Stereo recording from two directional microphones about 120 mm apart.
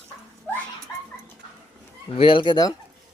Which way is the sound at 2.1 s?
45° left (ahead or behind).